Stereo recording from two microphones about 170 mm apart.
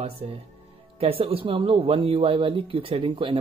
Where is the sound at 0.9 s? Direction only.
35° right (ahead or behind).